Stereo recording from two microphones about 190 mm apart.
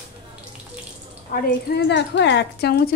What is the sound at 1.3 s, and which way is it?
A woman's voice, 55° left (ahead or behind).